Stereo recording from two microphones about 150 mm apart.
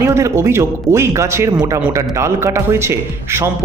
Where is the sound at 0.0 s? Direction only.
20° right (ahead or behind).